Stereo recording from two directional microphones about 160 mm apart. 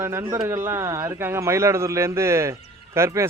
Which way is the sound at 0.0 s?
15° right (ahead or behind).